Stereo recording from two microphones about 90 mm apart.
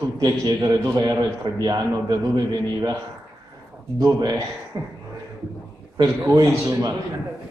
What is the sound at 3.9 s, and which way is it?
Speech, 45° right (ahead or behind).